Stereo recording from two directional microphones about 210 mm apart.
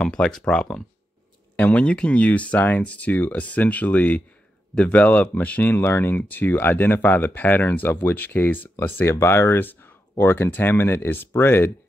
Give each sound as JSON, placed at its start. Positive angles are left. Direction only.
{"t": 0.0, "sound": "speech", "side_deg": 5}